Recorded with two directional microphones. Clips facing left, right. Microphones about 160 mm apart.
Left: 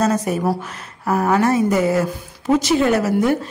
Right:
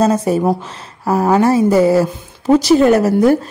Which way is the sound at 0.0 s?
30° right (ahead or behind).